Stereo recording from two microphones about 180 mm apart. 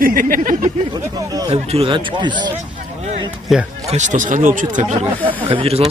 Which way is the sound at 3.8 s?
40° right (ahead or behind).